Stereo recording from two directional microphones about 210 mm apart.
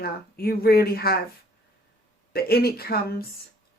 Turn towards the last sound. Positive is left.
turn(degrees=45)  # may be behind; listen again after turning